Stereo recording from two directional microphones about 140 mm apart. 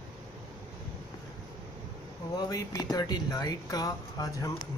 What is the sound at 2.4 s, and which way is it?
Speech, 25° left (ahead or behind).